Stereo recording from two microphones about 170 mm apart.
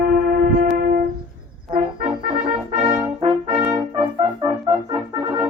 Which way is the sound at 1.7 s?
30° right (ahead or behind).